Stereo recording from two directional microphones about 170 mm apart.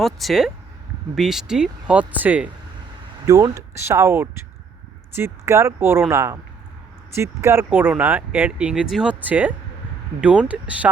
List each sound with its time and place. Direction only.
0.0 s speech: centre (ahead or behind)